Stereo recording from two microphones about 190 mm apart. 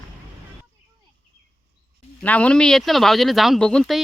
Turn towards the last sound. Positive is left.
turn(degrees=5)  # may be behind; listen again after turning